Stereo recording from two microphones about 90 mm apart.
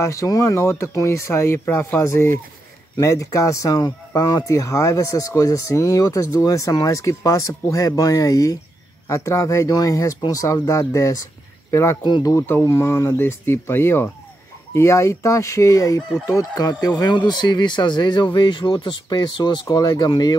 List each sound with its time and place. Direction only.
0.0 s speech: 35° left (ahead or behind)
12.0 s speech: 50° left (ahead or behind)
12.4 s speech: 25° left (ahead or behind)
12.7 s speech: 35° left (ahead or behind)
13.2 s speech: 25° left (ahead or behind); by 20.3 s 50° left (ahead or behind)